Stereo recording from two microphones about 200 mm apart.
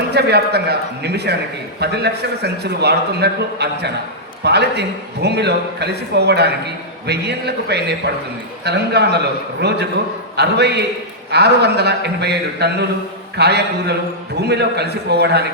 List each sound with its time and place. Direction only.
0.1 s a man's voice: 55° right (ahead or behind)